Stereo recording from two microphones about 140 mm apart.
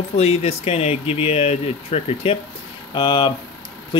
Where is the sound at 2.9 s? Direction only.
35° left (ahead or behind).